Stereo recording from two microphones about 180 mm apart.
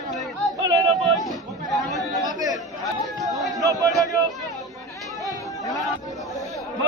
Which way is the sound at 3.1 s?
Centre (ahead or behind).